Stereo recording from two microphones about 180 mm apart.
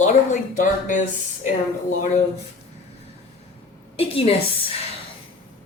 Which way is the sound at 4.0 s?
30° left (ahead or behind).